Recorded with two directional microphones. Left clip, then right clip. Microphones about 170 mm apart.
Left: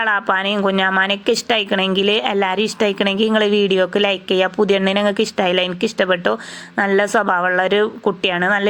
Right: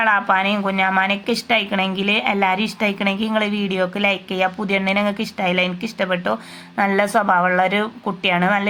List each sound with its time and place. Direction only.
0.0 s a woman's voice: 35° left (ahead or behind)